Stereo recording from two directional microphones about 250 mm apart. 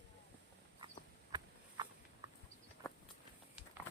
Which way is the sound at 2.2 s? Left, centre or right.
Centre.